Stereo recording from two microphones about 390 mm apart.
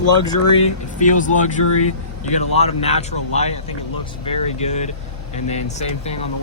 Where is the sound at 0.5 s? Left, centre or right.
Centre.